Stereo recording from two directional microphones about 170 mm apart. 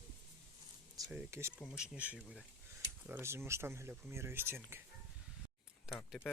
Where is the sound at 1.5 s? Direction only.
5° right (ahead or behind).